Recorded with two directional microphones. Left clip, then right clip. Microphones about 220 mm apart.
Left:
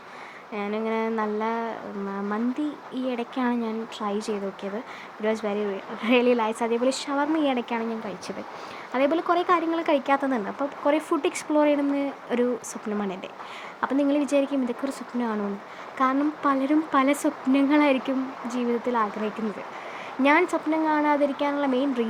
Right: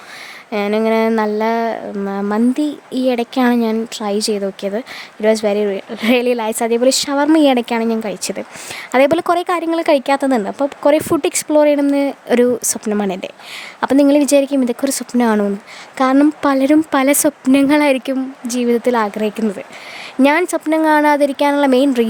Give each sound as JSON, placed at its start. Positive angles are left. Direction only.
{"t": 0.5, "sound": "speech", "side_deg": -45}